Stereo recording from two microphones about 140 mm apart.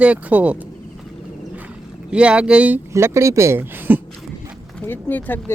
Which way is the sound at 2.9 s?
20° right (ahead or behind).